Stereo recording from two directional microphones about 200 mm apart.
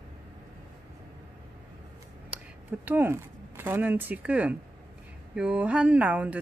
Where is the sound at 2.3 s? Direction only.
10° right (ahead or behind).